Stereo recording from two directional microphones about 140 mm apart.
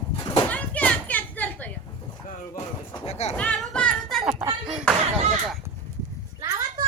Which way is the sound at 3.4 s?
10° left (ahead or behind).